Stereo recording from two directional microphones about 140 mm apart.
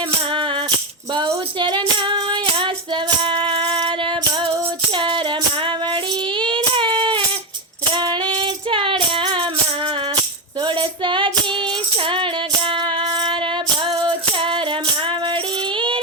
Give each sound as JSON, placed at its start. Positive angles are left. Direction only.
{"t": 0.3, "sound": "music", "side_deg": -35}